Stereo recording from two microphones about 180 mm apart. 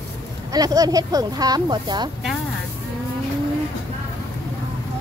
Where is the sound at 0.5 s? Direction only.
20° right (ahead or behind).